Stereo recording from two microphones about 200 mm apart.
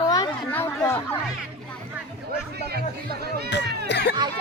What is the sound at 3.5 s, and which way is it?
Music, 60° left (ahead or behind).